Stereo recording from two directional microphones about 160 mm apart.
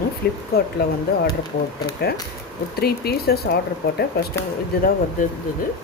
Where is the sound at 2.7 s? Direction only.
75° left (ahead or behind).